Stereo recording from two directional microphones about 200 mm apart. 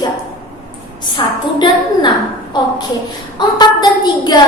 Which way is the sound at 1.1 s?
20° left (ahead or behind).